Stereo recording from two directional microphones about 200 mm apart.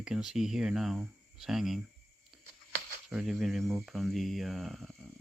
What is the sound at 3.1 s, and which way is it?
Speech, centre (ahead or behind).